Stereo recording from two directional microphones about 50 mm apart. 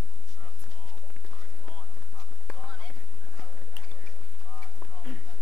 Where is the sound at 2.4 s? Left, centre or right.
Centre.